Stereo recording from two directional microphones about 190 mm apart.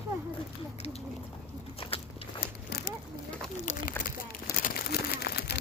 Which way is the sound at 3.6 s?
40° left (ahead or behind).